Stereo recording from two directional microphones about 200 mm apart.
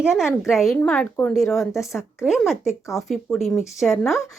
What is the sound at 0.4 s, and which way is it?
Speech, centre (ahead or behind).